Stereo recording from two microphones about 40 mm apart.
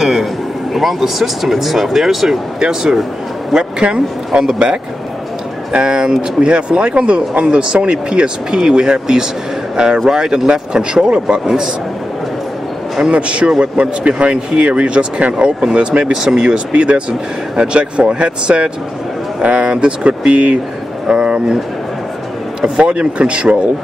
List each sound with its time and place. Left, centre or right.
0.0 s vehicle: centre
0.7 s speech: centre
13.0 s speech: right
16.1 s speech: centre
16.4 s speech: right
22.8 s speech: right